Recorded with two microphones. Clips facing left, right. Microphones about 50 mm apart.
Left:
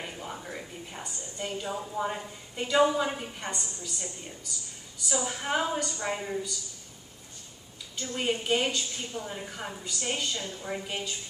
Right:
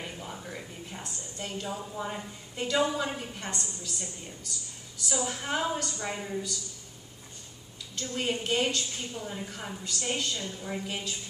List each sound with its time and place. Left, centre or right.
0.0 s a woman's voice: centre
7.9 s a woman's voice: centre